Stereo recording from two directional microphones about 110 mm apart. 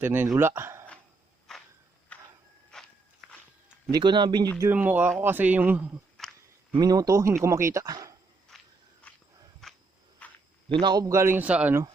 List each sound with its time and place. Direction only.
0.0 s a man's voice: 20° right (ahead or behind)
1.5 s a sound: 5° left (ahead or behind)
2.7 s walk: 5° left (ahead or behind)
3.9 s speech: 45° right (ahead or behind)
4.7 s a man's voice: 15° right (ahead or behind)
6.1 s a sound: centre (ahead or behind)
6.7 s a man's voice: 35° right (ahead or behind)
8.5 s walk: centre (ahead or behind)
9.1 s walk: 10° left (ahead or behind)
9.6 s a sound: 5° left (ahead or behind)
10.2 s a sound: 15° left (ahead or behind)
10.7 s a man's voice: 45° right (ahead or behind); by 11.8 s 10° right (ahead or behind)